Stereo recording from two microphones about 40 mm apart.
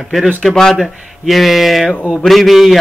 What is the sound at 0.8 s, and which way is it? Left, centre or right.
Speech, centre.